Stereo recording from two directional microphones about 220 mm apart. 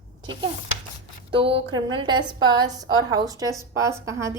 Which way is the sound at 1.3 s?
25° right (ahead or behind).